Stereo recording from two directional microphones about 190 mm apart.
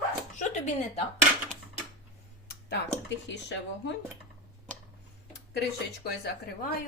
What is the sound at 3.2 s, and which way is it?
Speech, 65° left (ahead or behind).